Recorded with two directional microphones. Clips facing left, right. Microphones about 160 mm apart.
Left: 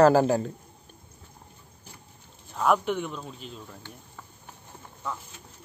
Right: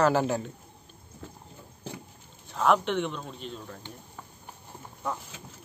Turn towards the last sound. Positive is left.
turn(degrees=5)  # may be behind; listen again after turning